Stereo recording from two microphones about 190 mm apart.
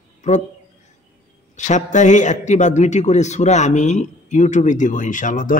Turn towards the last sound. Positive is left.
turn(degrees=40)  # may be behind; listen again after turning